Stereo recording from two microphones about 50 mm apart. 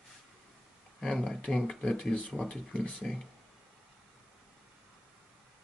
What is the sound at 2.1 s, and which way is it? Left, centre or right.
Speech, left.